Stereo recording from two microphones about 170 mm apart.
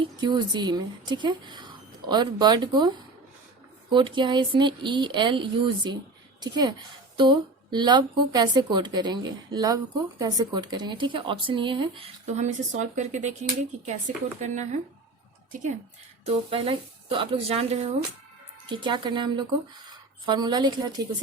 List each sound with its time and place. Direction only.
0.0 s a woman's voice: 25° right (ahead or behind)
3.9 s a woman's voice: 30° right (ahead or behind)
12.3 s speech: 45° right (ahead or behind)
14.4 s speech: 40° right (ahead or behind)
16.2 s a woman's voice: 35° right (ahead or behind)